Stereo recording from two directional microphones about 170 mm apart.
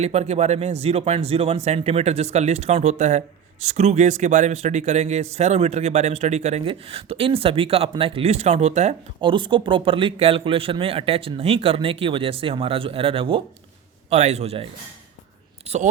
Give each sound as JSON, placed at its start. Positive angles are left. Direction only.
{"t": 0.0, "sound": "a man's voice", "side_deg": -40}
{"t": 9.3, "sound": "a man's voice", "side_deg": -30}